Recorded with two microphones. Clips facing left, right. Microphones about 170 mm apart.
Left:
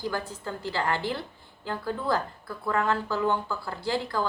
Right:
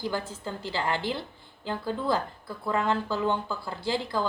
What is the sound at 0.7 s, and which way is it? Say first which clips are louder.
Speech: left 1 dB; 20° right (ahead or behind).